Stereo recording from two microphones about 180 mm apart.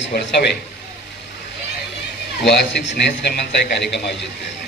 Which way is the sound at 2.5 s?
65° left (ahead or behind).